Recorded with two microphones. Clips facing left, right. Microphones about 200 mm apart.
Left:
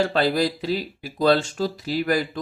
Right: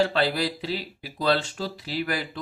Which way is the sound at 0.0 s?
45° left (ahead or behind).